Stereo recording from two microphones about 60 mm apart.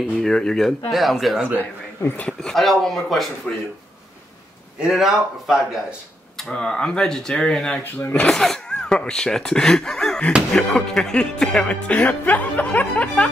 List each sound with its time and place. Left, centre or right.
0.2 s speech: centre
2.5 s speech: centre
3.5 s speech: centre
4.7 s speech: centre
6.3 s speech: centre
7.8 s speech: left
8.3 s speech: centre
11.6 s speech: left